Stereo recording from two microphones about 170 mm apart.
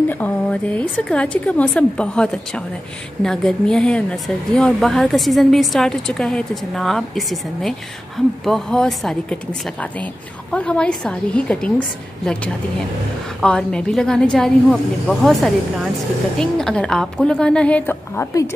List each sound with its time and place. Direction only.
0.1 s a woman's voice: 10° left (ahead or behind)
13.4 s a woman's voice: 5° left (ahead or behind)